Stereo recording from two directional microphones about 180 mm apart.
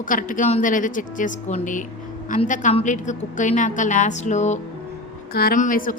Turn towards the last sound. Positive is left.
turn(degrees=50)  # may be behind; listen again after turning